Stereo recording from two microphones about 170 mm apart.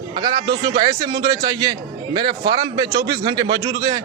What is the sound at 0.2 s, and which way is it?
A man's voice, 25° right (ahead or behind).